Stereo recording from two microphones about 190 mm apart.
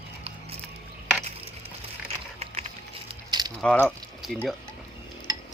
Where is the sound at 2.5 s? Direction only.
30° right (ahead or behind).